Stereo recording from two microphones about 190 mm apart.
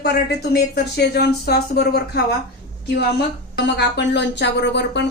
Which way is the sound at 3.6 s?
65° left (ahead or behind).